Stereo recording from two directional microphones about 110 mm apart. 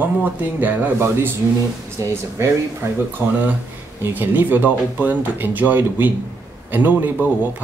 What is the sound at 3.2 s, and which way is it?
Speech, 25° right (ahead or behind).